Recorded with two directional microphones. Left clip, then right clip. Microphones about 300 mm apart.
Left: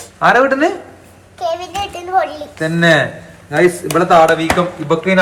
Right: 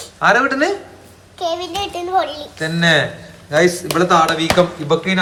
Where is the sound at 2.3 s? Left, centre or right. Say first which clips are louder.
Left 3 dB; centre.